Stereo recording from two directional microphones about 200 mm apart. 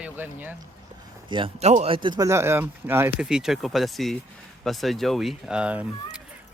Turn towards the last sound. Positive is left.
turn(degrees=-5)  # may be behind; listen again after turning